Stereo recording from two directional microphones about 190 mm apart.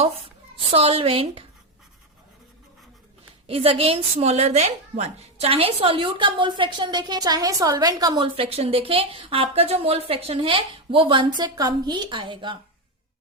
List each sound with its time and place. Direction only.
0.7 s a woman's voice: 30° right (ahead or behind)
3.4 s a woman's voice: 30° right (ahead or behind)